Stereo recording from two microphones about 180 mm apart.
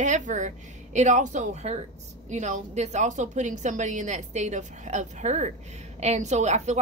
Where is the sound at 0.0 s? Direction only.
40° right (ahead or behind).